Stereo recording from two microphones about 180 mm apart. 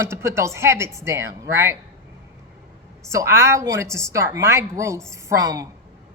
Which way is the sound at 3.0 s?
15° right (ahead or behind).